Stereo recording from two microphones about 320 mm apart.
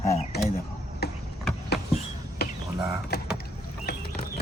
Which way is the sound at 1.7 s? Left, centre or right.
Left.